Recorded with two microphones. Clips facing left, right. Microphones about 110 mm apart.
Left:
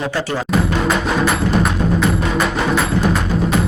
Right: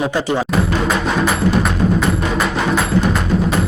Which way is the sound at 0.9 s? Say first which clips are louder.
Even; centre (ahead or behind).